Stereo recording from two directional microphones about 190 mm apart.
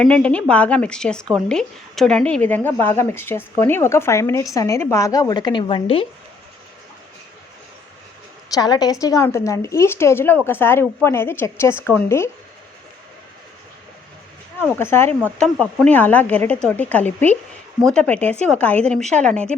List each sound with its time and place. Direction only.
0.0 s speech: 5° left (ahead or behind); by 6.1 s 30° left (ahead or behind)
8.5 s speech: 20° left (ahead or behind)
14.8 s speech: 15° left (ahead or behind)